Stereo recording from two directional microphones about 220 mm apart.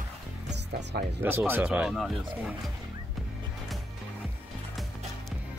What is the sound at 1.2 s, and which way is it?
Speech, 10° right (ahead or behind).